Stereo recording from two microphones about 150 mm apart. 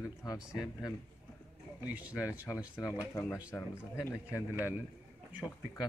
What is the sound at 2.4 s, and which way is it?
Speech, 20° left (ahead or behind).